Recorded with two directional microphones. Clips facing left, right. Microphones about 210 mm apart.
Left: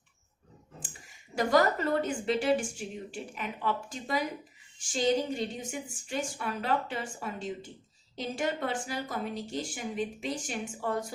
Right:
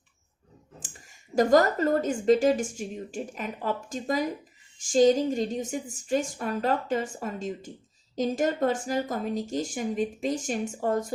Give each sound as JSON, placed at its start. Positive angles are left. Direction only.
{"t": 0.8, "sound": "speech", "side_deg": -45}